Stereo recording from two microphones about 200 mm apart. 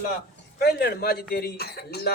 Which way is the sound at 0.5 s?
55° left (ahead or behind).